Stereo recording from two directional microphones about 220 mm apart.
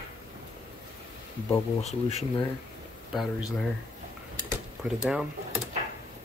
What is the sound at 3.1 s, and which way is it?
Speech, 5° right (ahead or behind).